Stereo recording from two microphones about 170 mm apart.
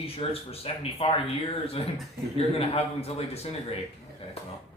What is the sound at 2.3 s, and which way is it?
Speech, 35° left (ahead or behind).